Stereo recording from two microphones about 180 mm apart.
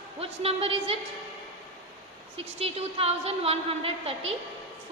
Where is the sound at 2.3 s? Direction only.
35° right (ahead or behind).